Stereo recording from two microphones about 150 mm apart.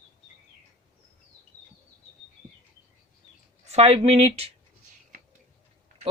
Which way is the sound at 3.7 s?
45° right (ahead or behind).